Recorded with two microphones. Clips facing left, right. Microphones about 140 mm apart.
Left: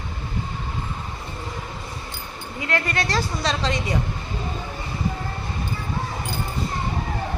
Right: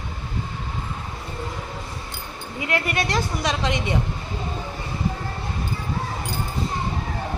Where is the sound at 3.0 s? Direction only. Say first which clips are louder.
Even; 20° right (ahead or behind).